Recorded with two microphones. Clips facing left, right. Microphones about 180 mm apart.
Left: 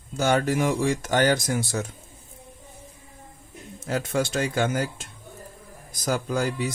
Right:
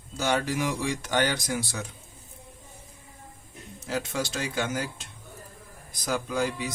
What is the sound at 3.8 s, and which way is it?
Speech, 50° left (ahead or behind).